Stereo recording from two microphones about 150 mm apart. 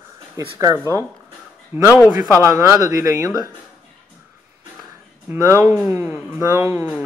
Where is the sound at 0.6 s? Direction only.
20° right (ahead or behind).